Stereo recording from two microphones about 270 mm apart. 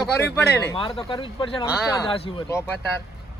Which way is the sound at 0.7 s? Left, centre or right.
Centre.